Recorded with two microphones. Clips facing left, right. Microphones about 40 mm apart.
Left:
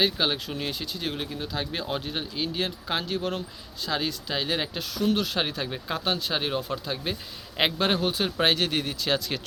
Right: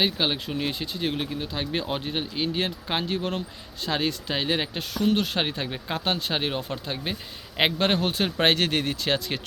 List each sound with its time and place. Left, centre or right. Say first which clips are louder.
0.0 s speech: even; centre
0.7 s speech: right 3 dB; right
7.8 s speech: right 1 dB; right